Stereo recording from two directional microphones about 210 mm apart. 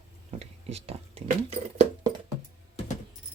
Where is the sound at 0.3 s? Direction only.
30° right (ahead or behind).